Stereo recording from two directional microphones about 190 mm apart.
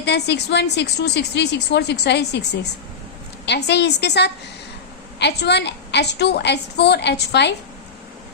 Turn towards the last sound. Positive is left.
turn(degrees=60)  # may be behind; listen again after turning